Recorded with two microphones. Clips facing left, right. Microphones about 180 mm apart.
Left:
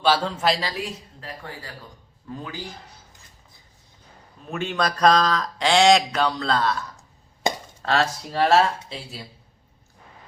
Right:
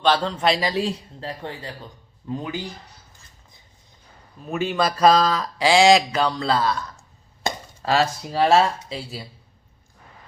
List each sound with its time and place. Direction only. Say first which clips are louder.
0.0 s a man's voice: right 1 dB; 5° left (ahead or behind)
0.6 s a woman's voice: right 6 dB; 25° right (ahead or behind)
4.4 s speech: right 3 dB; centre (ahead or behind)